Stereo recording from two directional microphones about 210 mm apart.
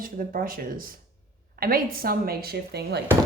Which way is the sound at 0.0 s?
45° right (ahead or behind).